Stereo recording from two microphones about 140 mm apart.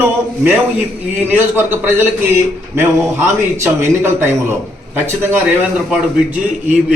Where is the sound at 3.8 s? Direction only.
15° right (ahead or behind).